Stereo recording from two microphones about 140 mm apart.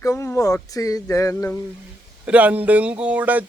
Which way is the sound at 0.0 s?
20° left (ahead or behind).